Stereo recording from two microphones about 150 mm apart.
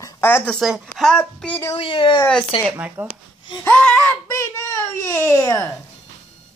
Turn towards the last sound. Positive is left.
turn(degrees=20)  # may be behind; listen again after turning